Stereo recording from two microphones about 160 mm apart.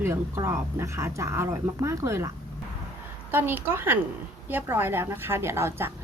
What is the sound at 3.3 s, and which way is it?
A woman's voice, 15° right (ahead or behind).